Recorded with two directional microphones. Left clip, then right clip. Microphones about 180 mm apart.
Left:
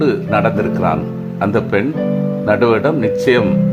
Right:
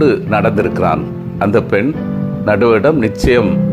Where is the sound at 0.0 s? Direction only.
20° right (ahead or behind).